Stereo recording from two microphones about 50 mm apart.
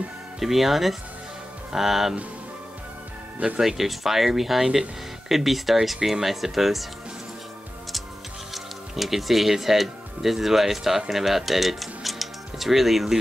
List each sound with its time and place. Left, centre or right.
0.4 s speech: centre
3.3 s speech: right
3.6 s speech: centre
8.5 s speech: centre